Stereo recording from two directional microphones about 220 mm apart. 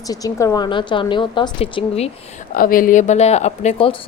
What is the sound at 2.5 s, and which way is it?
Speech, 40° left (ahead or behind).